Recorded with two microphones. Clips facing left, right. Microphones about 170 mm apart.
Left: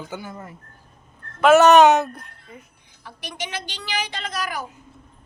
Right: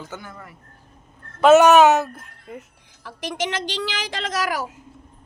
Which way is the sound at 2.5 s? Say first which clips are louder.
Right 10 dB; 90° right.